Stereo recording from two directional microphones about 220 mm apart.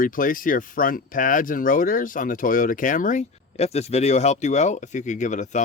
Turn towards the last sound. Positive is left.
turn(degrees=35)  # may be behind; listen again after turning